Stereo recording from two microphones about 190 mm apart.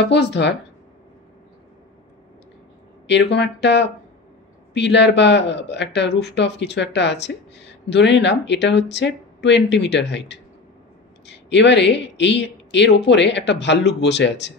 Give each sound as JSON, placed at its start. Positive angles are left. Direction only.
{"t": 0.0, "sound": "speech", "side_deg": 65}
{"t": 3.1, "sound": "speech", "side_deg": 65}